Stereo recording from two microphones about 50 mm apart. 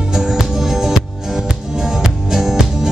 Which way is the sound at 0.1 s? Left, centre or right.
Centre.